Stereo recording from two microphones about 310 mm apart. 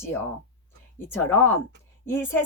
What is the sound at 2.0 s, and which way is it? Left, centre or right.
Speech, centre.